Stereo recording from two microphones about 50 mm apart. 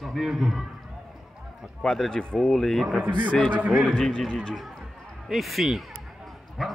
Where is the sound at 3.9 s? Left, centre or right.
Centre.